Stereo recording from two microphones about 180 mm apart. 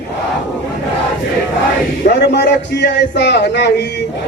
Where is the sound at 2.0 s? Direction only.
65° left (ahead or behind).